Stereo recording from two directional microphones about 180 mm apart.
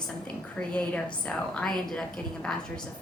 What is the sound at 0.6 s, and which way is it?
A woman's voice, 5° left (ahead or behind).